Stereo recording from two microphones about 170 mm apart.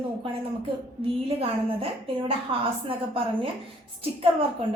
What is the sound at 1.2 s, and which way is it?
A woman's voice, 35° right (ahead or behind).